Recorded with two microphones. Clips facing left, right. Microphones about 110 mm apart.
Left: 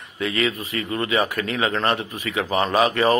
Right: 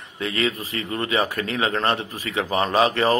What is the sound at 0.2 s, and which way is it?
A man's voice, 30° right (ahead or behind).